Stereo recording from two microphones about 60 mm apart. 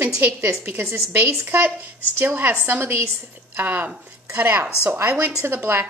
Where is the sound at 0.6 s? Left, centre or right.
Right.